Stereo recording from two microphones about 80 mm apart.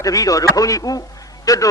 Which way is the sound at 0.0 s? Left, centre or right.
Left.